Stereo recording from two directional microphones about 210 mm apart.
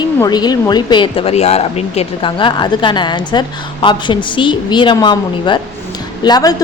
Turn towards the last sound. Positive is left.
turn(degrees=20)  # may be behind; listen again after turning